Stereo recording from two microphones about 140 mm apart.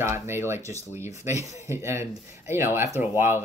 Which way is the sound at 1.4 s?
55° left (ahead or behind).